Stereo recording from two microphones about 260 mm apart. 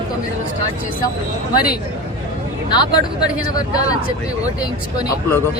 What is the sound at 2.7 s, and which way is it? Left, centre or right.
Speech, centre.